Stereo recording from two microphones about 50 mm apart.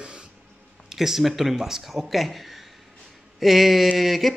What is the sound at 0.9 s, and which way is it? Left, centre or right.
A man's voice, centre.